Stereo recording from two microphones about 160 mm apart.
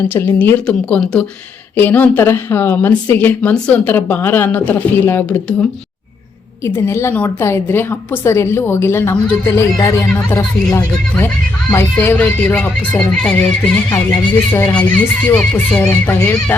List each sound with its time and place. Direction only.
0.1 s a woman's voice: 10° left (ahead or behind)
6.7 s a woman's voice: 15° left (ahead or behind)
13.9 s speech: 20° left (ahead or behind)
14.8 s a woman's voice: 10° left (ahead or behind)